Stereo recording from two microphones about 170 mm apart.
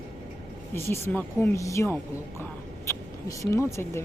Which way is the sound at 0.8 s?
15° left (ahead or behind).